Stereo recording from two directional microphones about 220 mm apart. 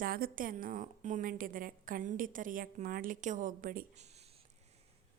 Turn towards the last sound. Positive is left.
turn(degrees=-30)  # may be behind; listen again after turning